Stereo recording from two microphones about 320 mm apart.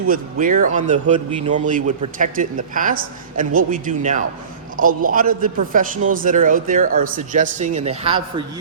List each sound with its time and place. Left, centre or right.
0.1 s a man's voice: right